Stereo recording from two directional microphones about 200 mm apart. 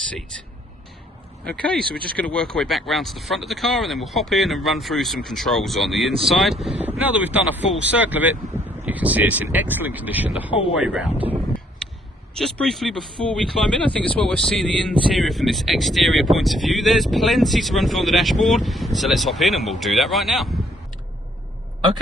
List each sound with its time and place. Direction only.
1.6 s speech: 5° left (ahead or behind)
11.8 s a sound: 5° left (ahead or behind)
12.3 s speech: 5° left (ahead or behind)